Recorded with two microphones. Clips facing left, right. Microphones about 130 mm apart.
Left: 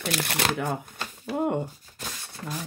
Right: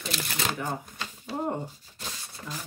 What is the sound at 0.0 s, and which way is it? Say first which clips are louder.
Speech: left 4 dB; 65° left (ahead or behind).